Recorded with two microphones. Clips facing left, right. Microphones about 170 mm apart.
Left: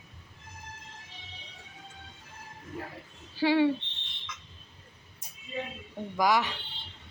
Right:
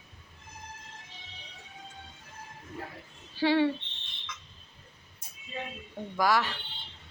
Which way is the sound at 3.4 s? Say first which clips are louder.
Left 1 dB; 10° left (ahead or behind).